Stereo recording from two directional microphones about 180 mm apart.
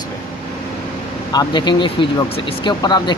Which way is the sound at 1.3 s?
25° left (ahead or behind).